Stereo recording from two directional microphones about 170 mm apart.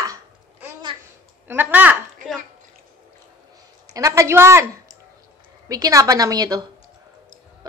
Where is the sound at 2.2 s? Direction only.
50° right (ahead or behind).